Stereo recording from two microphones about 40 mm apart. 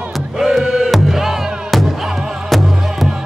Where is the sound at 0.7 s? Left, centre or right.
Centre.